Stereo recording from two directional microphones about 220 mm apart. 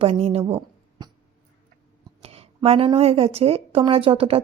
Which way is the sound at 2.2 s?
25° right (ahead or behind).